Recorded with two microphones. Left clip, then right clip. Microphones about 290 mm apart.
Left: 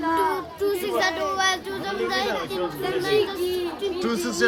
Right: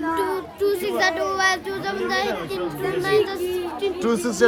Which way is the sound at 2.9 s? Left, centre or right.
Centre.